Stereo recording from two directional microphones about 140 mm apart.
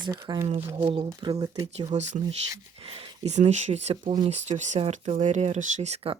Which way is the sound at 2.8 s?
45° right (ahead or behind).